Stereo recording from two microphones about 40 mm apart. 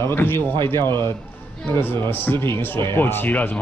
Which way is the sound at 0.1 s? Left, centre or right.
Left.